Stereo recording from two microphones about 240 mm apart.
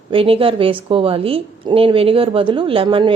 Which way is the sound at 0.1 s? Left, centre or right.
Right.